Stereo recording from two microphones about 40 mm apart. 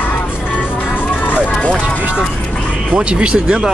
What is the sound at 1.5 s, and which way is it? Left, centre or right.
Music, left.